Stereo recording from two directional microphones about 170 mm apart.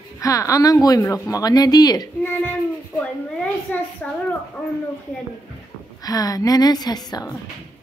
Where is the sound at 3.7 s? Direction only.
10° left (ahead or behind).